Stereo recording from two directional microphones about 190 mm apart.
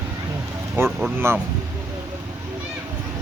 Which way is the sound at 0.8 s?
10° right (ahead or behind).